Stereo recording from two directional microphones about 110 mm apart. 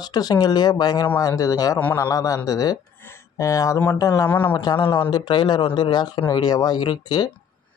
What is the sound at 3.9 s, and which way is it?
Speech, 35° left (ahead or behind).